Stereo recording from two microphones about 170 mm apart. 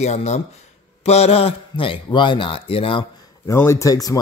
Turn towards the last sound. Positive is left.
turn(degrees=20)  # may be behind; listen again after turning